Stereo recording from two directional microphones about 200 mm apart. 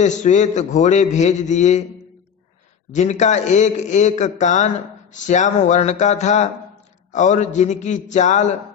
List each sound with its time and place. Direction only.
0.0 s a man's voice: 35° left (ahead or behind)
2.9 s a man's voice: 35° left (ahead or behind)